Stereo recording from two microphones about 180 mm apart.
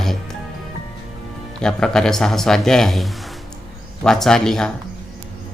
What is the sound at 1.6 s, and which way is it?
Speech, 5° left (ahead or behind).